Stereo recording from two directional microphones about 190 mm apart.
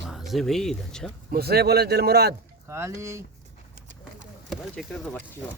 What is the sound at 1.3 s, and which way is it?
Speech, 55° right (ahead or behind).